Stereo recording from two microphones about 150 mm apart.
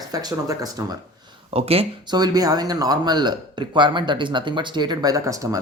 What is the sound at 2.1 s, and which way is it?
Speech, 25° right (ahead or behind).